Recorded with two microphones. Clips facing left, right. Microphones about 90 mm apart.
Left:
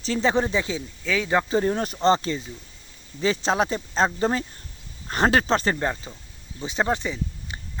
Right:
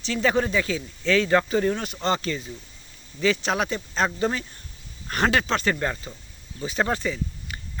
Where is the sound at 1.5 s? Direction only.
30° left (ahead or behind).